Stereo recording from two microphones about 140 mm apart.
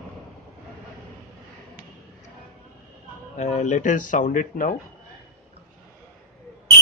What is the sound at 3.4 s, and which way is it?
Speech, 55° left (ahead or behind).